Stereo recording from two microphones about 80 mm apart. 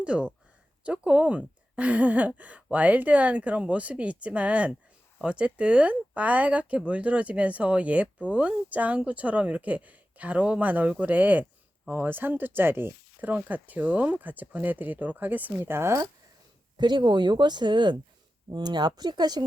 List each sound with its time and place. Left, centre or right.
0.0 s a woman's voice: centre; by 16.0 s right
16.7 s speech: right